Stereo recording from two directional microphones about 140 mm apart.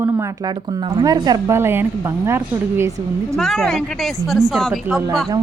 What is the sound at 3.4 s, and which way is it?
A woman's voice, centre (ahead or behind).